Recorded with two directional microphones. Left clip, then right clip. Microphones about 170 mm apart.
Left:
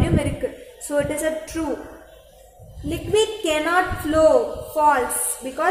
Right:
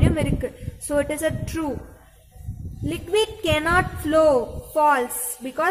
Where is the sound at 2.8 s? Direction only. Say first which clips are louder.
Left 2 dB; 30° right (ahead or behind).